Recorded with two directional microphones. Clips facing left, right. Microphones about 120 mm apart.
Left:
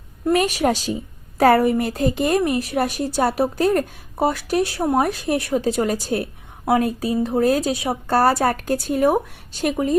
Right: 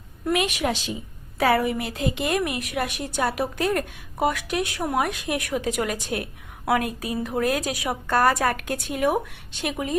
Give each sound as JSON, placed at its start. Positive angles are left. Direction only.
{"t": 0.3, "sound": "a woman's voice", "side_deg": 40}